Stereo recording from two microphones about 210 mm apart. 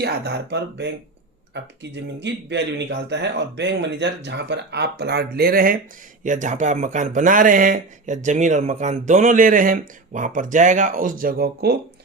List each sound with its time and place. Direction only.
0.0 s speech: 50° right (ahead or behind)